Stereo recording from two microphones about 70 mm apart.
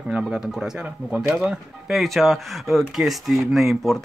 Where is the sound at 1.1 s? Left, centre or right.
Centre.